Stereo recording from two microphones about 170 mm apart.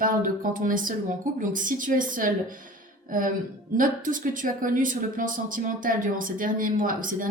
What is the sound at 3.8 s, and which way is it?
Speech, 50° right (ahead or behind).